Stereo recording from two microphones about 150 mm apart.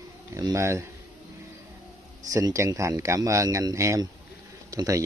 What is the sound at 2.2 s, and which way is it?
Speech, 20° right (ahead or behind).